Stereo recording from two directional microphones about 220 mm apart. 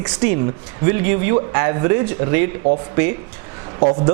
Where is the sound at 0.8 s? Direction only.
15° right (ahead or behind).